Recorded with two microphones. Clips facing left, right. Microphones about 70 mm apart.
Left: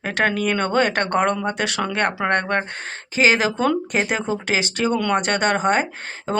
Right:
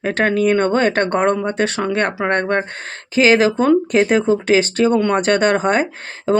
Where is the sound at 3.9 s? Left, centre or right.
Right.